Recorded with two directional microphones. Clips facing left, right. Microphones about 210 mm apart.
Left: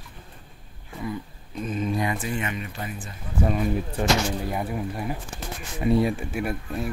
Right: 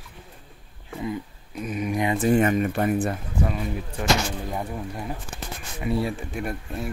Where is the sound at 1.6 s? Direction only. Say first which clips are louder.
Even; 15° right (ahead or behind).